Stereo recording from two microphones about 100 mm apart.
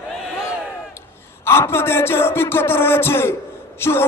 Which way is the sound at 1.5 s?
25° left (ahead or behind).